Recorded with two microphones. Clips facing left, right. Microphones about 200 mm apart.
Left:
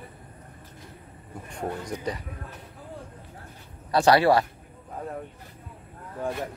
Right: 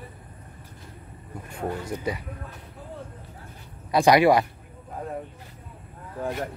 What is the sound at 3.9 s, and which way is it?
Speech, 15° right (ahead or behind).